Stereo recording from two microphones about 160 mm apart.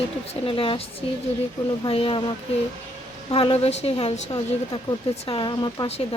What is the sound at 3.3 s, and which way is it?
Speech, 35° left (ahead or behind).